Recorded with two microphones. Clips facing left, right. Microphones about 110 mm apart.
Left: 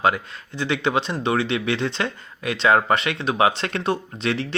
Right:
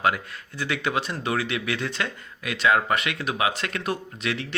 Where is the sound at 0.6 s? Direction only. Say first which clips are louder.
Left 4 dB; 25° left (ahead or behind).